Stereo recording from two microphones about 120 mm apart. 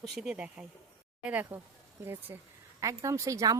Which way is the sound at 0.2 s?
10° right (ahead or behind).